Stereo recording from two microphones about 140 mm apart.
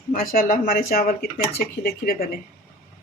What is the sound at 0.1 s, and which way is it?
Speech, 90° left.